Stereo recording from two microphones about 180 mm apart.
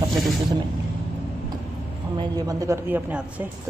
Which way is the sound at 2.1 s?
20° right (ahead or behind).